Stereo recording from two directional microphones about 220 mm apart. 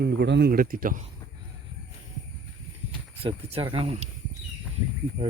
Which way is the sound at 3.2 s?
25° right (ahead or behind).